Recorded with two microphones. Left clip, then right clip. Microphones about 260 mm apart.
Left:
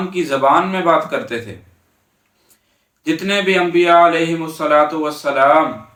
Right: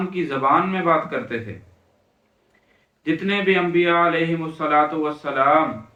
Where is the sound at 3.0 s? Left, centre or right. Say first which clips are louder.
Left 4 dB; centre.